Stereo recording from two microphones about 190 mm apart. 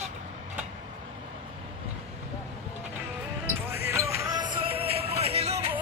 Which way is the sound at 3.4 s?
10° right (ahead or behind).